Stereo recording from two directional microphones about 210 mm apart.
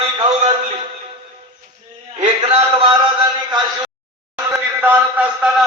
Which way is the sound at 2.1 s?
30° right (ahead or behind).